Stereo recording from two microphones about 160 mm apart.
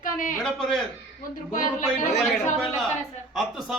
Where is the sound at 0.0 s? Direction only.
55° left (ahead or behind).